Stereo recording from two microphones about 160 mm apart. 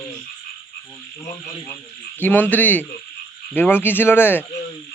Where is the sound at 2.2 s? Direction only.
10° left (ahead or behind).